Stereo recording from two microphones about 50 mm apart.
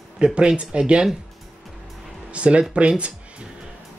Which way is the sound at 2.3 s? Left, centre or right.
Right.